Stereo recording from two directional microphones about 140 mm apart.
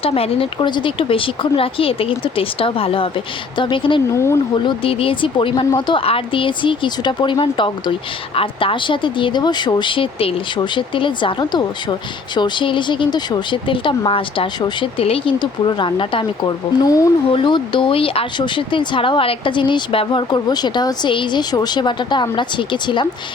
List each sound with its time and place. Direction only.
0.0 s speech: 45° left (ahead or behind)
4.1 s speech: 20° left (ahead or behind)
4.5 s speech: 35° left (ahead or behind)
17.3 s speech: 35° left (ahead or behind)